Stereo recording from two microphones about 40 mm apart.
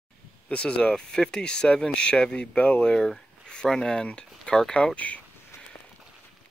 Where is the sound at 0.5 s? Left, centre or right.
Left.